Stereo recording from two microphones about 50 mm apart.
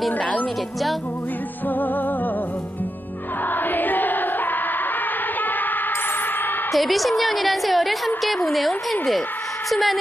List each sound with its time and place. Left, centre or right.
3.5 s music: left
6.7 s a woman's voice: centre